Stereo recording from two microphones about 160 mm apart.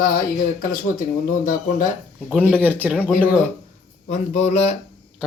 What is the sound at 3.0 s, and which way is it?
Speech, 10° left (ahead or behind).